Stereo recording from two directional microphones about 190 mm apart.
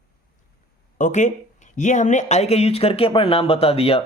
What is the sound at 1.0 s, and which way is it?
Speech, 40° left (ahead or behind).